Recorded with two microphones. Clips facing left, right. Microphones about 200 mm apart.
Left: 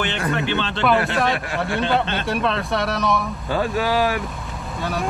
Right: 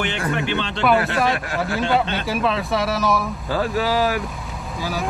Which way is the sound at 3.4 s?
20° left (ahead or behind).